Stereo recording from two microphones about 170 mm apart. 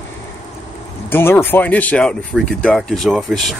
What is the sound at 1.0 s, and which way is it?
Speech, 10° left (ahead or behind).